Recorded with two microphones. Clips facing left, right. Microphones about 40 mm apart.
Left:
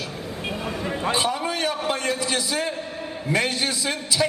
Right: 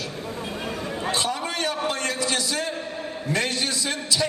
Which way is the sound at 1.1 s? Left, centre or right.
Centre.